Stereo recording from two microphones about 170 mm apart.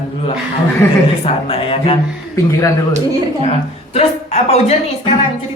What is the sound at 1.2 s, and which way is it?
Speech, 35° left (ahead or behind).